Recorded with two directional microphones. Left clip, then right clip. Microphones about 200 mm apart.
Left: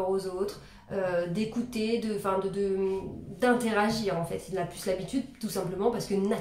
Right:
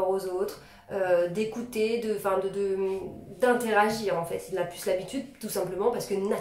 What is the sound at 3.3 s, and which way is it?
A woman's voice, 10° left (ahead or behind).